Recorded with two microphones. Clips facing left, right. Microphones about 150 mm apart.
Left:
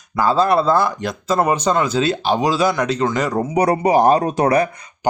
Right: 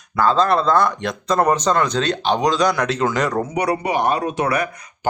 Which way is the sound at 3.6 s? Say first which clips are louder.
Left 7 dB; 40° left (ahead or behind).